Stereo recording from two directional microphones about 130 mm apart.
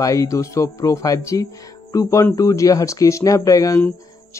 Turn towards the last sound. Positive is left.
turn(degrees=25)  # may be behind; listen again after turning